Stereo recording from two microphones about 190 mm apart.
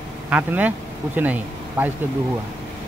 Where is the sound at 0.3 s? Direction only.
10° right (ahead or behind).